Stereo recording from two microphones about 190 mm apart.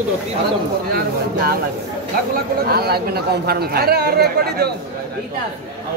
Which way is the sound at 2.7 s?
55° right (ahead or behind).